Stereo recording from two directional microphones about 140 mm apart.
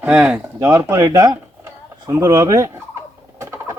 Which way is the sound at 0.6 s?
20° right (ahead or behind).